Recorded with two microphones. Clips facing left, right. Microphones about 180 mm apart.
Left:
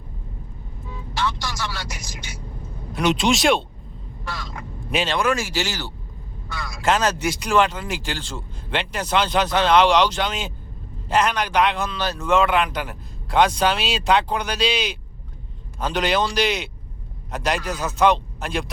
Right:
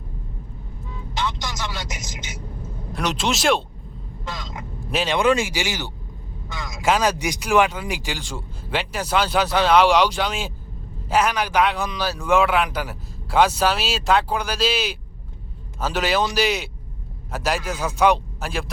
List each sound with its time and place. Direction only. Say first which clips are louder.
1.1 s vehicle: left 1 dB; 20° right (ahead or behind)
2.9 s speech: left 4 dB; centre (ahead or behind)
4.3 s speech: even; 20° right (ahead or behind)